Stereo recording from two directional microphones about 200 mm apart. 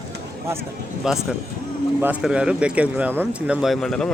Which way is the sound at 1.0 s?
Centre (ahead or behind).